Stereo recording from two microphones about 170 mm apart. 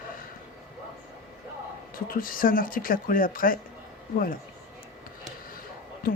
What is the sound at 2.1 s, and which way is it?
Speech, 55° left (ahead or behind).